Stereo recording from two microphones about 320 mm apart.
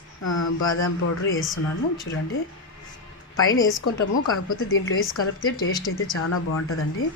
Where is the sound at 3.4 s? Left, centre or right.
Left.